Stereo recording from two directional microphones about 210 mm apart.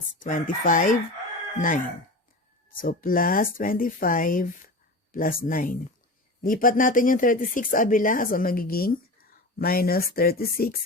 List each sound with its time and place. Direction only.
0.2 s speech: 40° left (ahead or behind)